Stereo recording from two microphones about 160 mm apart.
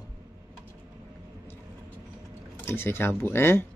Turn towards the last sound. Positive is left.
turn(degrees=15)  # may be behind; listen again after turning